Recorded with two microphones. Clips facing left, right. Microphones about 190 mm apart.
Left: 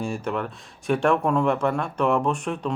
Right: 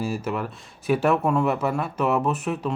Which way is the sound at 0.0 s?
5° right (ahead or behind).